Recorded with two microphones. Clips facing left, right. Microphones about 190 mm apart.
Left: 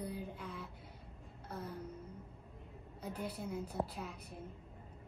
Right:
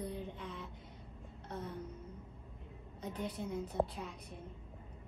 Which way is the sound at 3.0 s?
5° left (ahead or behind).